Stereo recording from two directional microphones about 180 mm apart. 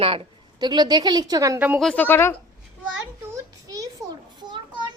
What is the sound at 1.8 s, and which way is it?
Speech, 5° left (ahead or behind).